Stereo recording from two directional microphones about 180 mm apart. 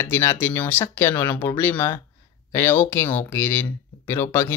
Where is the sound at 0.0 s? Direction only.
15° left (ahead or behind).